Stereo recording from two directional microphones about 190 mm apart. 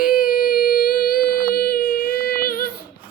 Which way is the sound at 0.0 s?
50° left (ahead or behind).